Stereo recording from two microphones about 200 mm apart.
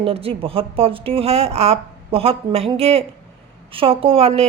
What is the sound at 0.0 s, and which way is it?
A woman's voice, 30° right (ahead or behind).